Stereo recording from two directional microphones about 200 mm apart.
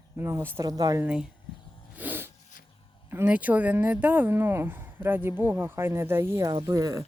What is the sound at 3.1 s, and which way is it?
Speech, 10° right (ahead or behind).